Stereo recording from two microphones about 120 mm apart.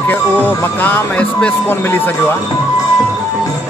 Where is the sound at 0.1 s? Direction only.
15° left (ahead or behind).